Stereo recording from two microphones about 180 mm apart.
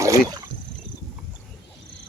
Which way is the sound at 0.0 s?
20° right (ahead or behind).